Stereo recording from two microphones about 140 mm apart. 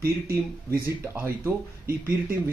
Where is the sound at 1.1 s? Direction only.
15° right (ahead or behind).